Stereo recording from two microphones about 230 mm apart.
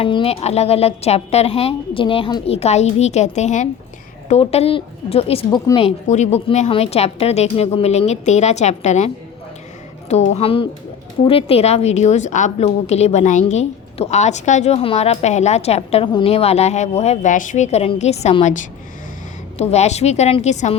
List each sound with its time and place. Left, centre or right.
0.0 s a woman's voice: left
10.3 s a woman's voice: left